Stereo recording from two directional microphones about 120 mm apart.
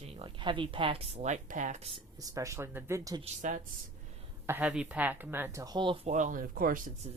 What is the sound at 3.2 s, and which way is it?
Speech, 90° right.